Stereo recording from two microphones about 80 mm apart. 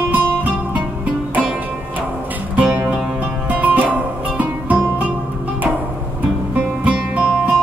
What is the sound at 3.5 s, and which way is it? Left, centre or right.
Music, centre.